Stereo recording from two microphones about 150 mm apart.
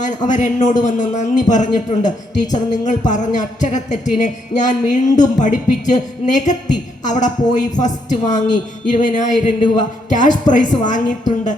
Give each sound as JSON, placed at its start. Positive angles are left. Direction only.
{"t": 0.0, "sound": "a man's voice", "side_deg": 55}